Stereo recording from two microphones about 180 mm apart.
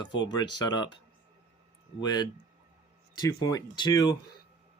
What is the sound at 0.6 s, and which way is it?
Speech, 25° left (ahead or behind).